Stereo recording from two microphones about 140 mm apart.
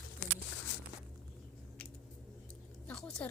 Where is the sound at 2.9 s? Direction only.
5° left (ahead or behind).